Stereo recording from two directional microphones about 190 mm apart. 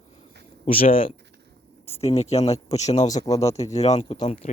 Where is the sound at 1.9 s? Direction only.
35° left (ahead or behind).